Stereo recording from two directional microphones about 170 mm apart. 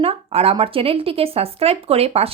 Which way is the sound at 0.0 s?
35° right (ahead or behind).